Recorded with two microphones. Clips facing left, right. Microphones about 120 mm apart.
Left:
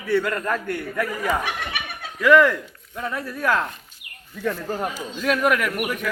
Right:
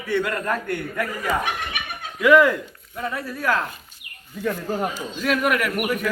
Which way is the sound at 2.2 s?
5° right (ahead or behind).